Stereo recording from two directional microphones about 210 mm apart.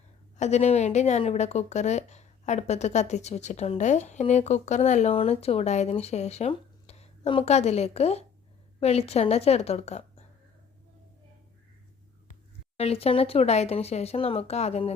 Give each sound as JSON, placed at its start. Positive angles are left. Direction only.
{"t": 0.3, "sound": "a woman's voice", "side_deg": 30}
{"t": 12.3, "sound": "speech", "side_deg": 30}